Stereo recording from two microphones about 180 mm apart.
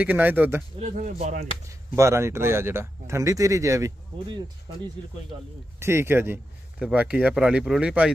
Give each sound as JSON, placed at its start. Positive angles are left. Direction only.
{"t": 0.0, "sound": "speech", "side_deg": -10}
{"t": 0.7, "sound": "speech", "side_deg": -40}
{"t": 1.7, "sound": "speech", "side_deg": -15}
{"t": 5.8, "sound": "speech", "side_deg": -15}